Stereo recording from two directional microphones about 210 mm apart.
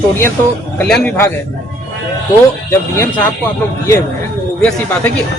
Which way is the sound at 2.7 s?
15° left (ahead or behind).